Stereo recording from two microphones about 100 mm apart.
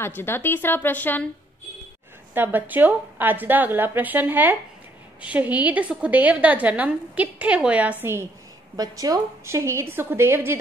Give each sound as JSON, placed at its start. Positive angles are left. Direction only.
{"t": 0.0, "sound": "a woman's voice", "side_deg": 20}
{"t": 2.3, "sound": "a woman's voice", "side_deg": -20}
{"t": 8.7, "sound": "a woman's voice", "side_deg": -40}